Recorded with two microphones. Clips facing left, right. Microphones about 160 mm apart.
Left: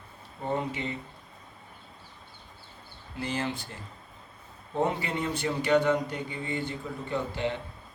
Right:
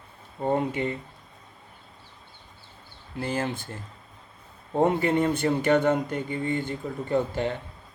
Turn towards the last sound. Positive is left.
turn(degrees=-45)  # may be behind; listen again after turning